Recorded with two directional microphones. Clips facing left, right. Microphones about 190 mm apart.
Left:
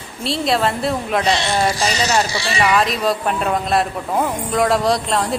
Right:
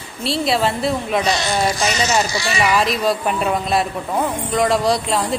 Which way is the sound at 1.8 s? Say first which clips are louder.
Even; 35° left (ahead or behind).